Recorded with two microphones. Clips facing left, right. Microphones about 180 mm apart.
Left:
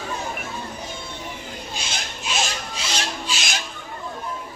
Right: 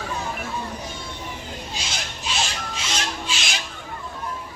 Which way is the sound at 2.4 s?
35° left (ahead or behind).